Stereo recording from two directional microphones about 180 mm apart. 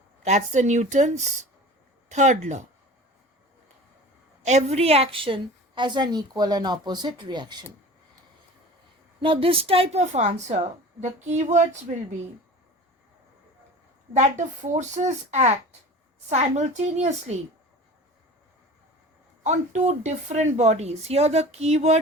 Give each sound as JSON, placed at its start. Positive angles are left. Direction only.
{"t": 0.3, "sound": "a woman's voice", "side_deg": -40}
{"t": 4.4, "sound": "a woman's voice", "side_deg": -40}
{"t": 9.2, "sound": "a woman's voice", "side_deg": -30}
{"t": 14.1, "sound": "a woman's voice", "side_deg": -40}
{"t": 19.4, "sound": "a woman's voice", "side_deg": -40}